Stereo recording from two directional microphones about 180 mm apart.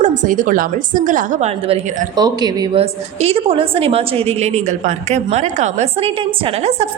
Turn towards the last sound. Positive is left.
turn(degrees=-35)  # may be behind; listen again after turning